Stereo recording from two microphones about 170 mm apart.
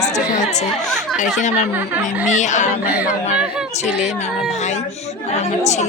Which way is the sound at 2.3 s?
45° left (ahead or behind).